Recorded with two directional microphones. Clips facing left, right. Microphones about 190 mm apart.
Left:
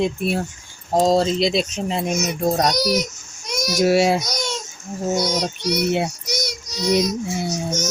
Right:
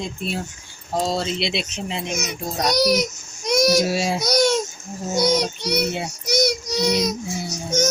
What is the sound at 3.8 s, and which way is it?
Speech, 65° left (ahead or behind).